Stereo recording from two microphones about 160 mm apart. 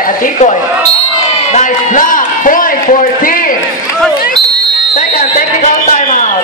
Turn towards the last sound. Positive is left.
turn(degrees=50)  # may be behind; listen again after turning